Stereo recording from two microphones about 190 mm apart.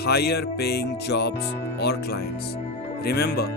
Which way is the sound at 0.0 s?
55° left (ahead or behind).